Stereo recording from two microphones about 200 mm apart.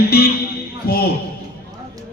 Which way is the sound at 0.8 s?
50° left (ahead or behind).